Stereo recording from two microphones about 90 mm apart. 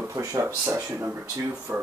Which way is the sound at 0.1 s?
35° right (ahead or behind).